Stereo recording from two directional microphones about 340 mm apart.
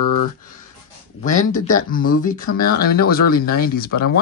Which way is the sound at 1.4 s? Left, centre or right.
Left.